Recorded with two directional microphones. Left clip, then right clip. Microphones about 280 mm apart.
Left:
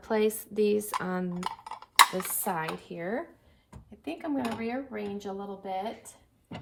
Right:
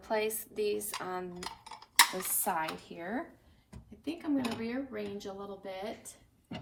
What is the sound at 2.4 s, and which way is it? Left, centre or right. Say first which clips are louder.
Speech: right 1 dB; left.